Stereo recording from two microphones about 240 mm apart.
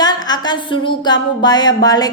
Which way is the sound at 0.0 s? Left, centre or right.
Centre.